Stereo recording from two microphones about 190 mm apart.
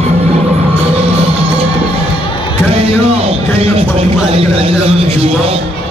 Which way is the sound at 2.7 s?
30° right (ahead or behind).